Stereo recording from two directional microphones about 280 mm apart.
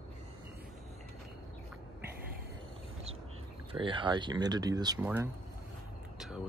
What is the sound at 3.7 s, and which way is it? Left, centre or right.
Speech, centre.